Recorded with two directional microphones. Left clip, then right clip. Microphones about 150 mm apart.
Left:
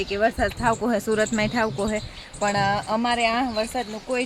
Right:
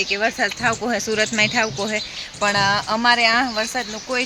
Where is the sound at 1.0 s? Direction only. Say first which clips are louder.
Right 4 dB; 40° left (ahead or behind).